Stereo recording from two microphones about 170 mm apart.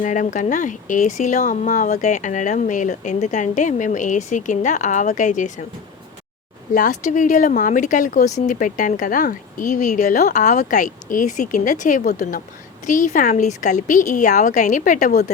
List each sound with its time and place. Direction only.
0.0 s speech: 50° left (ahead or behind)
6.7 s speech: 45° left (ahead or behind)
12.8 s speech: 45° left (ahead or behind)